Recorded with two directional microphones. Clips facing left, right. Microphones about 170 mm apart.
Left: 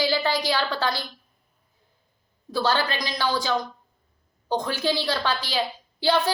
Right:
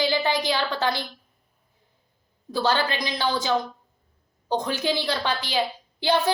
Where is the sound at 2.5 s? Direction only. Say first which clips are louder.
Right 1 dB; 20° right (ahead or behind).